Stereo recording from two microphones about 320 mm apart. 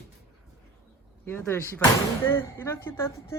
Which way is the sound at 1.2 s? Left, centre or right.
Centre.